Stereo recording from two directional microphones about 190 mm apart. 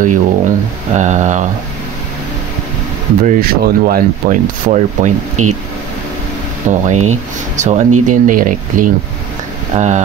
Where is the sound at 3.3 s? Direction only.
50° right (ahead or behind).